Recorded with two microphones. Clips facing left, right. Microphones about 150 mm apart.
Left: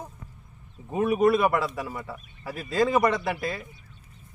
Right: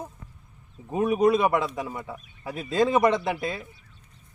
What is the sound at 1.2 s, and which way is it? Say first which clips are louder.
A man's voice: even; 20° right (ahead or behind).